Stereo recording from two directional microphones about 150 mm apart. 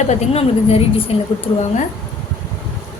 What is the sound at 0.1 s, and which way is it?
A woman's voice, 40° left (ahead or behind).